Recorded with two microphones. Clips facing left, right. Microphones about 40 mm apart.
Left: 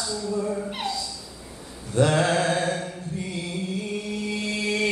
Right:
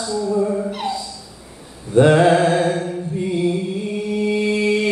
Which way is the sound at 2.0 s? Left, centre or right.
Right.